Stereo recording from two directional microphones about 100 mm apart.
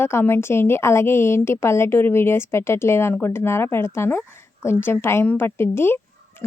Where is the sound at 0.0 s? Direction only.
25° left (ahead or behind).